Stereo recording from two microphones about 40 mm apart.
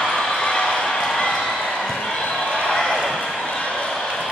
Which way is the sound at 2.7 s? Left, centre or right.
Centre.